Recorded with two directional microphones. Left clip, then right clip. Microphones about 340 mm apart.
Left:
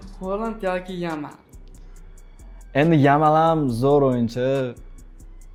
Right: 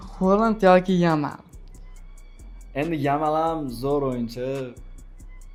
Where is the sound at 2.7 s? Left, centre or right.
Left.